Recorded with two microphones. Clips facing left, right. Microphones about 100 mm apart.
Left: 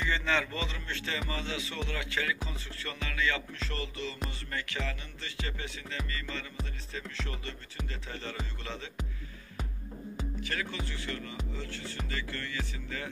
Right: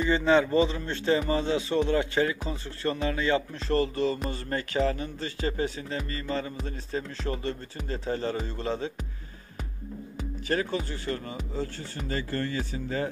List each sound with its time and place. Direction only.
0.0 s speech: 35° right (ahead or behind)
10.5 s speech: 35° right (ahead or behind)